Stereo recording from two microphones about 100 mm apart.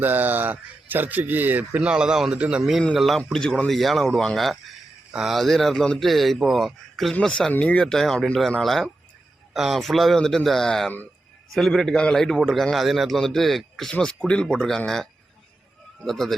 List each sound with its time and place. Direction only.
0.0 s a man's voice: 20° right (ahead or behind); by 15.0 s 5° left (ahead or behind)
16.0 s a man's voice: 5° left (ahead or behind)